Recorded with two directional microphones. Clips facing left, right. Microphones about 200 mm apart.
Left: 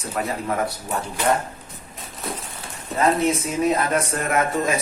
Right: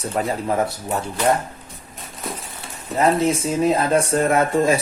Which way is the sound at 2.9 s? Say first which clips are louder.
Right 2 dB; 30° right (ahead or behind).